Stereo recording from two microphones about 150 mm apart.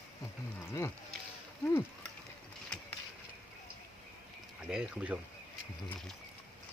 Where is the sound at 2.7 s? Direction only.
5° left (ahead or behind).